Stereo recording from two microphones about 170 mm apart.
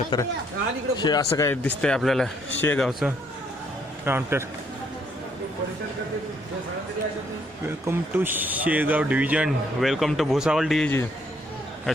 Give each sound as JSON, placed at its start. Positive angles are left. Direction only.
{"t": 0.1, "sound": "speech", "side_deg": 25}
{"t": 1.8, "sound": "a man's voice", "side_deg": 5}
{"t": 4.0, "sound": "speech", "side_deg": -15}
{"t": 7.9, "sound": "speech", "side_deg": -10}